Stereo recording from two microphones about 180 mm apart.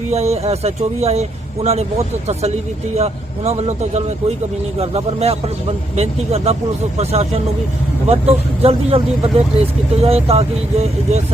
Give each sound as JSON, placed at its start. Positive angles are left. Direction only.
{"t": 0.1, "sound": "speech", "side_deg": -35}
{"t": 2.9, "sound": "speech", "side_deg": -35}